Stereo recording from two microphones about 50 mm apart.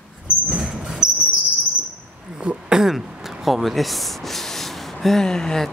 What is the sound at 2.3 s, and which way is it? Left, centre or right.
Throat clearing, centre.